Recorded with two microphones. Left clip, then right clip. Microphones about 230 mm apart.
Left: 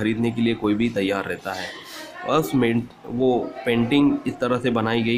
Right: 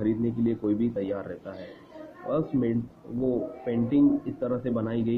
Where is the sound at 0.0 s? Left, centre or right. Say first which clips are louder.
Left 4 dB; left.